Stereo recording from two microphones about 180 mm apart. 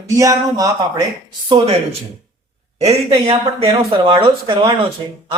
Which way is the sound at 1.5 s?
30° right (ahead or behind).